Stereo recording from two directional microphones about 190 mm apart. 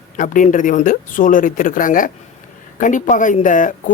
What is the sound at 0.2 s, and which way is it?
Speech, 40° left (ahead or behind).